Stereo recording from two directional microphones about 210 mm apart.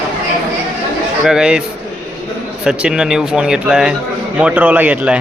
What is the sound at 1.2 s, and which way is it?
Speech, 5° right (ahead or behind).